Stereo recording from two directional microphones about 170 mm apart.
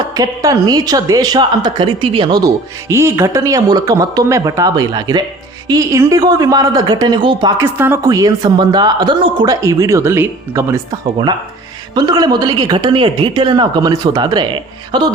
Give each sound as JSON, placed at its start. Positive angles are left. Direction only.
{"t": 0.1, "sound": "a man's voice", "side_deg": -20}
{"t": 7.6, "sound": "a man's voice", "side_deg": -15}
{"t": 11.9, "sound": "a man's voice", "side_deg": -25}